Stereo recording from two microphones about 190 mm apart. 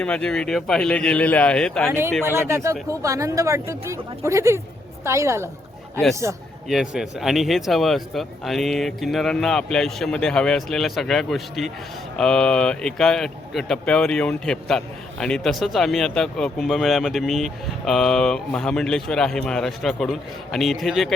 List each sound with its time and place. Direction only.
0.0 s speech: 5° left (ahead or behind)
2.2 s speech: 15° right (ahead or behind)
6.7 s speech: centre (ahead or behind)